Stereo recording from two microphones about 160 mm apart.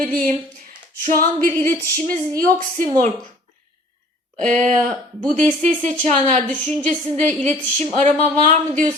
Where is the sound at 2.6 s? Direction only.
60° right (ahead or behind).